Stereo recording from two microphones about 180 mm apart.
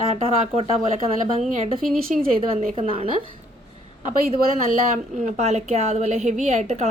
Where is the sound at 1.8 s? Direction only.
Centre (ahead or behind).